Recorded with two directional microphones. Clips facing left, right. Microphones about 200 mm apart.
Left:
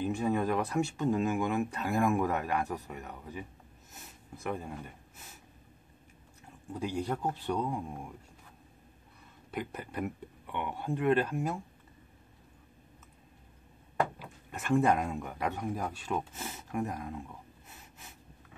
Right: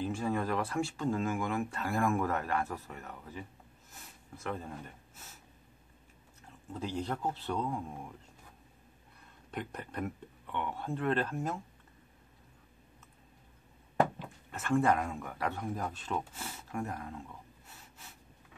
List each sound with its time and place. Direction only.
0.0 s speech: 15° left (ahead or behind)
6.7 s speech: 10° left (ahead or behind)
9.5 s speech: 5° left (ahead or behind)
14.1 s speech: 10° left (ahead or behind)
17.6 s snort: 20° left (ahead or behind)